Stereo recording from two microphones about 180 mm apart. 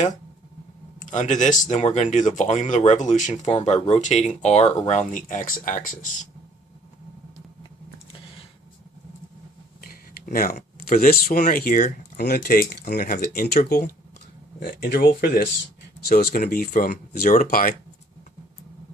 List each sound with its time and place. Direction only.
0.9 s speech: 45° left (ahead or behind)
9.8 s speech: 55° left (ahead or behind)